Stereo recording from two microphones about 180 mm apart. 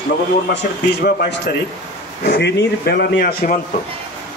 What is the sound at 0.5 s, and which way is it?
Speech, 70° left (ahead or behind).